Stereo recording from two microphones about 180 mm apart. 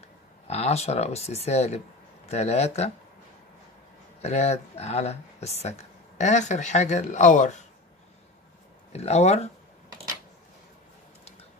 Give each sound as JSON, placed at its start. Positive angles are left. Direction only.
{"t": 0.5, "sound": "speech", "side_deg": 35}
{"t": 4.2, "sound": "speech", "side_deg": 35}
{"t": 8.9, "sound": "speech", "side_deg": 35}